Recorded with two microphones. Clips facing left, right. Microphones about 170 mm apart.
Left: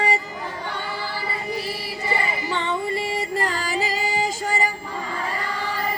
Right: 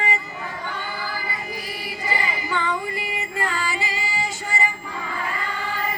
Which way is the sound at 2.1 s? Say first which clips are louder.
Left 1 dB; 25° left (ahead or behind).